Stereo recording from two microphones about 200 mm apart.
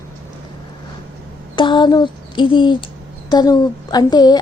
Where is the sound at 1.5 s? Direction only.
25° left (ahead or behind).